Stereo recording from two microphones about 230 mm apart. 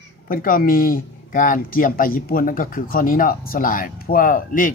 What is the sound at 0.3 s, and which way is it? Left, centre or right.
Speech, left.